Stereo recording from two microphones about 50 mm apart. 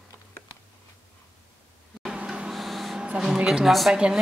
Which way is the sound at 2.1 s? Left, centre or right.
Centre.